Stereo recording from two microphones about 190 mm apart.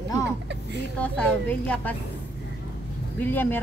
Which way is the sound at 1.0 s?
5° left (ahead or behind).